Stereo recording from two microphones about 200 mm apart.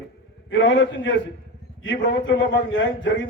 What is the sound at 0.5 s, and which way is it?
A man's voice, 65° left (ahead or behind).